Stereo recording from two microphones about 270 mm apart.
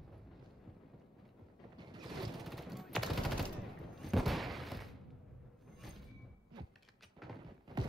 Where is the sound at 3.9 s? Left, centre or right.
Centre.